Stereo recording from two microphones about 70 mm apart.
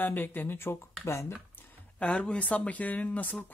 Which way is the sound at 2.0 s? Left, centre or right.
Centre.